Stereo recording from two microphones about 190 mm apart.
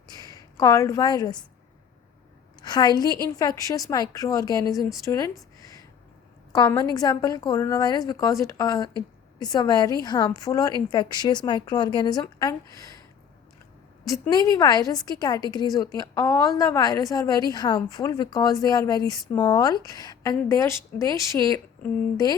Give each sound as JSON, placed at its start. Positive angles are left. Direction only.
{"t": 0.1, "sound": "a woman's voice", "side_deg": 20}
{"t": 2.6, "sound": "a woman's voice", "side_deg": 20}
{"t": 6.5, "sound": "a woman's voice", "side_deg": 20}
{"t": 14.3, "sound": "a woman's voice", "side_deg": 20}